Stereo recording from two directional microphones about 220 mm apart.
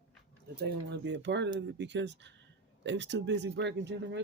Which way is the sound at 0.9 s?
55° right (ahead or behind).